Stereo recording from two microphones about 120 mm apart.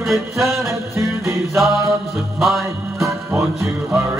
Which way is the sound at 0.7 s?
25° right (ahead or behind).